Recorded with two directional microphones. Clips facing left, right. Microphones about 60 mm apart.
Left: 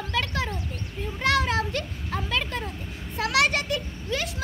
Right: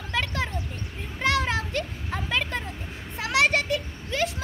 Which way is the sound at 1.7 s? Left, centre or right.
Right.